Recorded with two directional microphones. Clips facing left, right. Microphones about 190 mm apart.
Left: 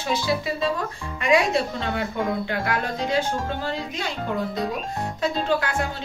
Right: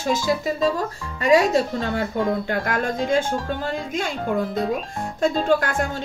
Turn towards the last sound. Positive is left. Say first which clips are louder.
# right 3 dB
turn(degrees=-50)  # may be behind; listen again after turning